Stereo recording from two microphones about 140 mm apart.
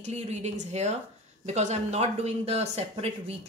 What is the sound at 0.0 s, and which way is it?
Speech, 55° right (ahead or behind).